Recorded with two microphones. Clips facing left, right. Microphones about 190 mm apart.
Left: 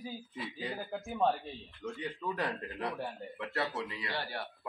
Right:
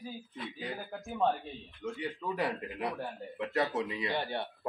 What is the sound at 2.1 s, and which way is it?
A man's voice, 15° right (ahead or behind).